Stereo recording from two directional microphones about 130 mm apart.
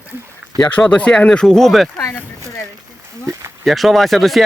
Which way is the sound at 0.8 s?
10° left (ahead or behind).